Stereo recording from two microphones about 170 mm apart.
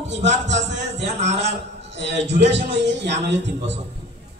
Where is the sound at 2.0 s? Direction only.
90° right.